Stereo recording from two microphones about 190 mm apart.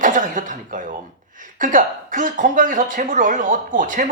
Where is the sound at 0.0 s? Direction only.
45° right (ahead or behind).